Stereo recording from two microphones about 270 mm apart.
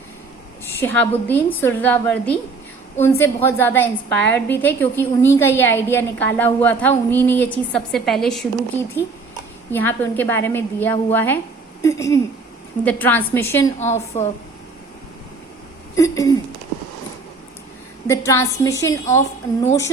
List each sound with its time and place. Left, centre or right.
0.8 s a woman's voice: centre
13.7 s a woman's voice: left
16.0 s a woman's voice: centre
18.1 s a woman's voice: centre